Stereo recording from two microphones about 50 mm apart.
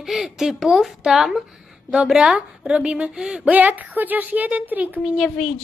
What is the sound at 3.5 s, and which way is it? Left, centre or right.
A woman's voice, right.